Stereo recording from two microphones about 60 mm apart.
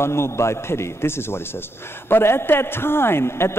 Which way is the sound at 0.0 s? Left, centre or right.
Left.